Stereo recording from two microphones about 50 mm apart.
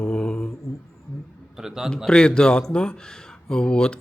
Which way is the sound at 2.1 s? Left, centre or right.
Centre.